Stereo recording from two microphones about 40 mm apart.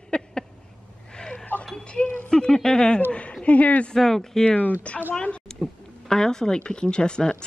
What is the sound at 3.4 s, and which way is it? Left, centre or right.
Speech, left.